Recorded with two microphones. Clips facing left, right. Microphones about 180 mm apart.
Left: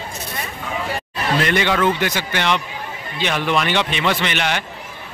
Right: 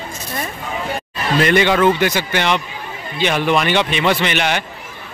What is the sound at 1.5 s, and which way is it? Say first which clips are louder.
Speech: right 6 dB; 15° right (ahead or behind).